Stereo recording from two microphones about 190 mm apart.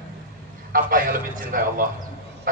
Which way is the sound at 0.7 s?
45° right (ahead or behind).